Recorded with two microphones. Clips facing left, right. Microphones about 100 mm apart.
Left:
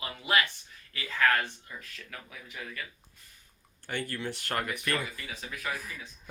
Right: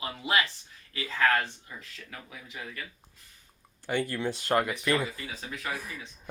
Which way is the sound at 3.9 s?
20° right (ahead or behind).